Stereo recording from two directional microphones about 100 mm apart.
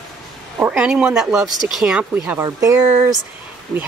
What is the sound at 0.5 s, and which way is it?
Speech, 10° right (ahead or behind).